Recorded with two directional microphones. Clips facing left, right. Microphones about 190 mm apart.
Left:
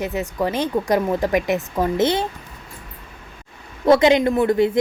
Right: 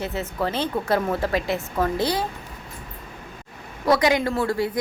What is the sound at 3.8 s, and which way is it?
Speech, 25° left (ahead or behind).